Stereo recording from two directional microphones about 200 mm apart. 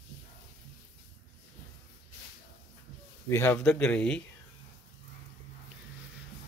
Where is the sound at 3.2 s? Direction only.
10° left (ahead or behind).